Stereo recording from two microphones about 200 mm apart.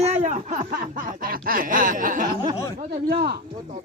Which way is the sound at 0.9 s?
45° right (ahead or behind).